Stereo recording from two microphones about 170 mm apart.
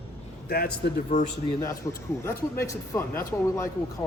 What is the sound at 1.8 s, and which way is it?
A man's voice, 20° left (ahead or behind).